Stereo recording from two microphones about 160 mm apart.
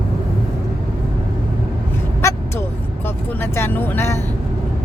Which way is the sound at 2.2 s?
15° left (ahead or behind).